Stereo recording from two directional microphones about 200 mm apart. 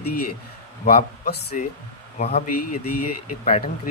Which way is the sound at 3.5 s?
35° left (ahead or behind).